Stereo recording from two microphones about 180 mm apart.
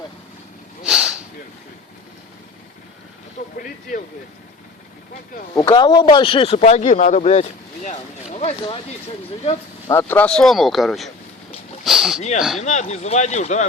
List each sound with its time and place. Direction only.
0.9 s snort: 5° right (ahead or behind)
3.4 s vehicle: 45° left (ahead or behind)
5.5 s a man's voice: 25° left (ahead or behind); by 7.4 s 40° left (ahead or behind)
7.9 s a sound: 40° left (ahead or behind)
8.6 s speech: 30° left (ahead or behind)
9.8 s speech: 15° left (ahead or behind); by 12.6 s centre (ahead or behind)
12.6 s a man's voice: 40° left (ahead or behind)